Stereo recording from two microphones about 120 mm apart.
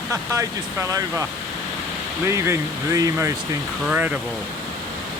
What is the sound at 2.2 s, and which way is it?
Speech, 20° right (ahead or behind).